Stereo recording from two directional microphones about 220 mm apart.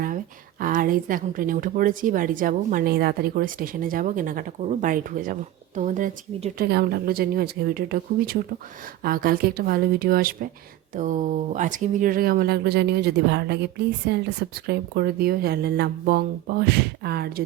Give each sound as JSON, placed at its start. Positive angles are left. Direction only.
{"t": 0.6, "sound": "a woman's voice", "side_deg": -40}